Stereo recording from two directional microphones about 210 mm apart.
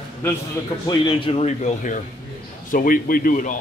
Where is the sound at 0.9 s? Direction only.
20° left (ahead or behind); by 3.5 s 40° left (ahead or behind).